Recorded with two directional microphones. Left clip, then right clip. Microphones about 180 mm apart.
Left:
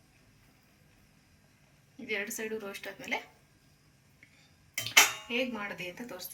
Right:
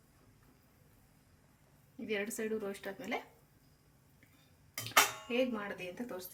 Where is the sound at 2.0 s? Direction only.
35° right (ahead or behind).